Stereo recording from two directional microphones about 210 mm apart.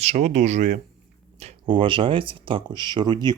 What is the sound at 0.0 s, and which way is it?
Speech, 35° right (ahead or behind).